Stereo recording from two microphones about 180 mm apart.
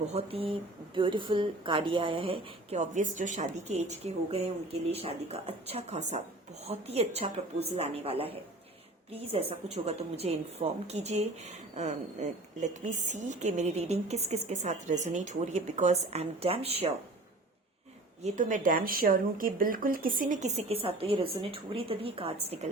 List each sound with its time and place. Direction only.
0.1 s a woman's voice: 30° right (ahead or behind)
18.2 s speech: 45° right (ahead or behind)